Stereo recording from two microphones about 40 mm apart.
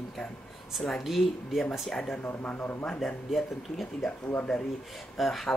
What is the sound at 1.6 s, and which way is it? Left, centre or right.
Speech, centre.